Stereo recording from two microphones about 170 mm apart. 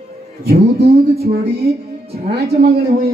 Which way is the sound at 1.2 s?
65° right (ahead or behind).